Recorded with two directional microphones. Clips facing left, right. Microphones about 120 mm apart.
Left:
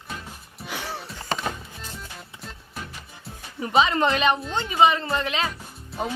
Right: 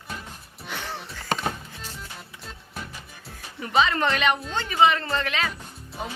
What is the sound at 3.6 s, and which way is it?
Speech, 20° left (ahead or behind).